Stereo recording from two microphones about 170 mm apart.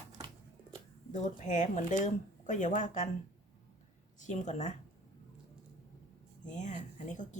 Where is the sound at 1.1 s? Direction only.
45° left (ahead or behind).